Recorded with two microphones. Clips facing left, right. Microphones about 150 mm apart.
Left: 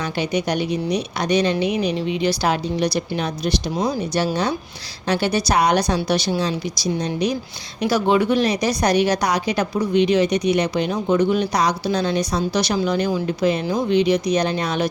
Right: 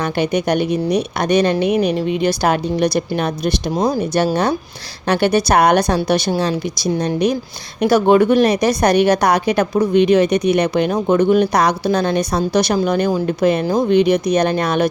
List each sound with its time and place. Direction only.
0.0 s a woman's voice: 55° right (ahead or behind)